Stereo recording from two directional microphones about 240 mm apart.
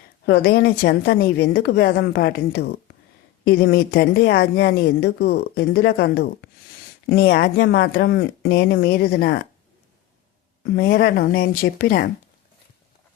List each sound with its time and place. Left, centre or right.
0.3 s a woman's voice: left
10.6 s a woman's voice: left